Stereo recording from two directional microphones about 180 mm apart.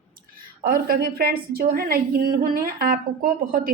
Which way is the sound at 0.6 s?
55° right (ahead or behind).